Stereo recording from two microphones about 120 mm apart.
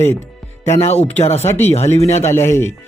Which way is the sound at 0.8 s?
65° left (ahead or behind).